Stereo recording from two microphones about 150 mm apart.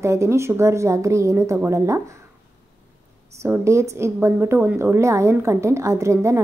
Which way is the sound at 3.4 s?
20° right (ahead or behind).